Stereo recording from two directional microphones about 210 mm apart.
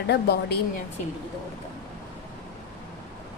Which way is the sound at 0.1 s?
50° left (ahead or behind).